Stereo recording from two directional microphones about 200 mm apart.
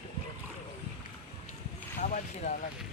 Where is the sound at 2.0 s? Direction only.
35° left (ahead or behind).